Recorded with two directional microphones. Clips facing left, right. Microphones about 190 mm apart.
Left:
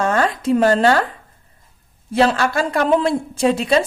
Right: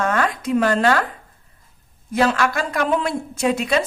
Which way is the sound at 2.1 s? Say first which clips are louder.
Left 2 dB; 30° left (ahead or behind).